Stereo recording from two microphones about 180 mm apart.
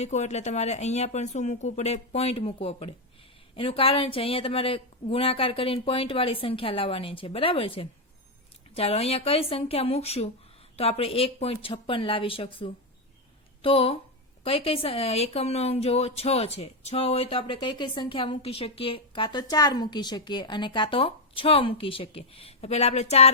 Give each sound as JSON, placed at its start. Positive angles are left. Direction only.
{"t": 0.0, "sound": "a woman's voice", "side_deg": 40}